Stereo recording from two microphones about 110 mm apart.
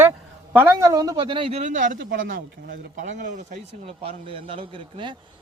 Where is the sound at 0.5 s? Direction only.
20° right (ahead or behind).